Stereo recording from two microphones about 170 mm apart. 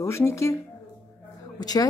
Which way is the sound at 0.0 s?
15° left (ahead or behind).